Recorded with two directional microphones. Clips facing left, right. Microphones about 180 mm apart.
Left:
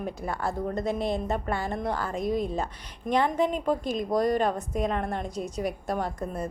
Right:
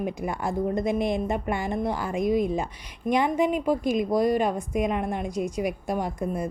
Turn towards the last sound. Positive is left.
turn(degrees=-10)  # may be behind; listen again after turning